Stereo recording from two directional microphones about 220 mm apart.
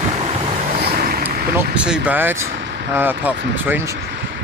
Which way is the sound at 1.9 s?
10° right (ahead or behind).